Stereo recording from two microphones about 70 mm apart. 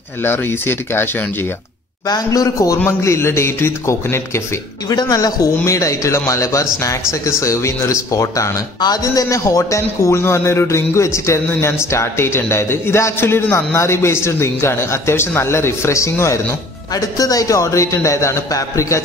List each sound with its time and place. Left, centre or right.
0.2 s a man's voice: left
2.0 s a man's voice: left
3.0 s a man's voice: left
4.8 s a man's voice: left
8.8 s a man's voice: left
16.9 s a man's voice: left